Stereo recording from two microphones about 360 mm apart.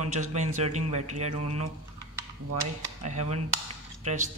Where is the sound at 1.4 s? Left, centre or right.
Right.